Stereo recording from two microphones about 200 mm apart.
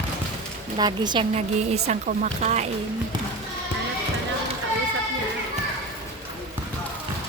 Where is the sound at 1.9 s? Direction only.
40° right (ahead or behind).